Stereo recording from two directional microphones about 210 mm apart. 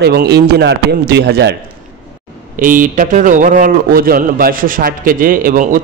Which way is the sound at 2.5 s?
40° right (ahead or behind).